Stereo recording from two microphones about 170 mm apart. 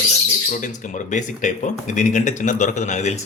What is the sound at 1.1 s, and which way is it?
Speech, 45° left (ahead or behind).